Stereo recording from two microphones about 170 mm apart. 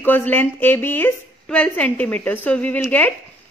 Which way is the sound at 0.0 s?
10° left (ahead or behind).